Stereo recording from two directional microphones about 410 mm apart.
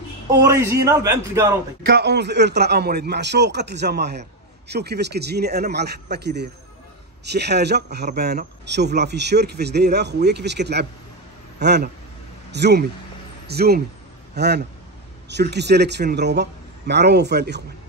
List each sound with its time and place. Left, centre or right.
0.4 s a man's voice: centre
1.9 s a man's voice: right